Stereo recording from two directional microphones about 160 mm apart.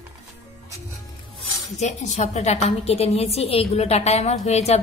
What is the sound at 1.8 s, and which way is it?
A woman's voice, 45° left (ahead or behind).